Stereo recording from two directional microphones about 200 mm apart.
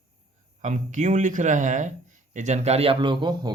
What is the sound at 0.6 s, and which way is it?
Speech, 35° right (ahead or behind).